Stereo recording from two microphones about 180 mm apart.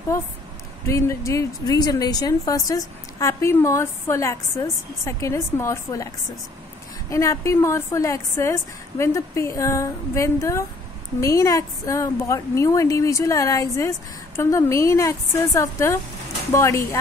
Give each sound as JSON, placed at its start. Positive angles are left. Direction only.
{"t": 0.8, "sound": "speech", "side_deg": 15}
{"t": 7.1, "sound": "speech", "side_deg": 15}